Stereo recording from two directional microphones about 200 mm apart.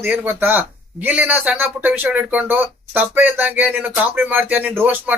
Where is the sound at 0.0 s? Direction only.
10° right (ahead or behind).